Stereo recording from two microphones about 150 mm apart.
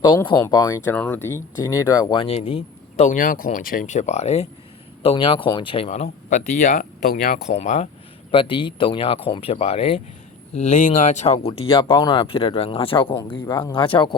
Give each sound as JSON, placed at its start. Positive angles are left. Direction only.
{"t": 0.4, "sound": "speech", "side_deg": 25}
{"t": 0.9, "sound": "speech", "side_deg": 10}
{"t": 2.2, "sound": "speech", "side_deg": 40}
{"t": 7.1, "sound": "speech", "side_deg": 75}
{"t": 7.4, "sound": "speech", "side_deg": 50}
{"t": 8.3, "sound": "speech", "side_deg": 35}
{"t": 10.5, "sound": "speech", "side_deg": 50}